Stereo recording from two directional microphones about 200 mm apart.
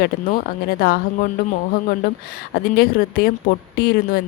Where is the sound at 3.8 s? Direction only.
50° left (ahead or behind).